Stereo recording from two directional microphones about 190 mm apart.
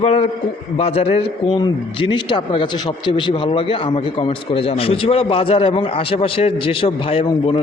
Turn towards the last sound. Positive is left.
turn(degrees=30)  # may be behind; listen again after turning